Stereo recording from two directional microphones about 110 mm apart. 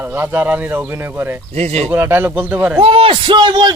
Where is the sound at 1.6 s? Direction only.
75° right (ahead or behind).